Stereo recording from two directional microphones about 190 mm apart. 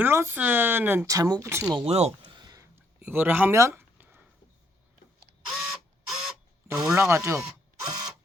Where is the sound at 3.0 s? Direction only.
10° right (ahead or behind).